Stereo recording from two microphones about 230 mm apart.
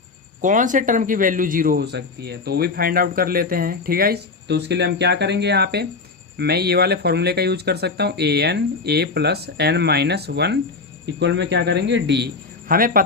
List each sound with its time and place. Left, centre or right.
0.4 s speech: right